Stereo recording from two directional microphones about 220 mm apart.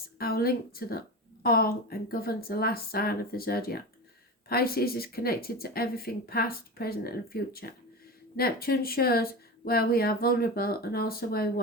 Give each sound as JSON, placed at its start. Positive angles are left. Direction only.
{"t": 0.2, "sound": "a woman's voice", "side_deg": 45}